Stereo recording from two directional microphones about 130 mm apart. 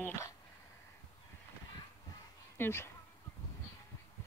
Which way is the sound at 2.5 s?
15° left (ahead or behind).